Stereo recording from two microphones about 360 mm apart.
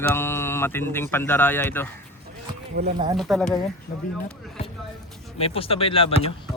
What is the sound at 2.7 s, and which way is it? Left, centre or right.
Speech, centre.